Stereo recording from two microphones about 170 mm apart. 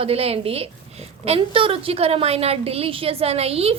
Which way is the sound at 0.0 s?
35° right (ahead or behind).